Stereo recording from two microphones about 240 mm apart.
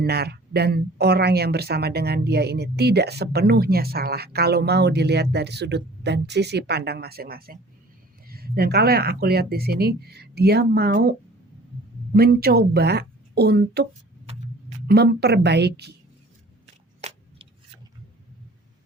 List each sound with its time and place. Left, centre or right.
0.0 s speech: right
12.1 s speech: right
14.8 s speech: right